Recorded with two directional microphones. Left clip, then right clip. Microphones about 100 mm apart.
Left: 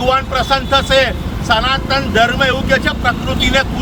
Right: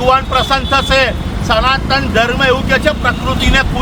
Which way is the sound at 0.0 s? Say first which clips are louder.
Right 3 dB; 15° right (ahead or behind).